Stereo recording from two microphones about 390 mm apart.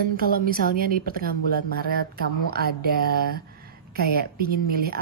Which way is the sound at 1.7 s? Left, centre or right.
Right.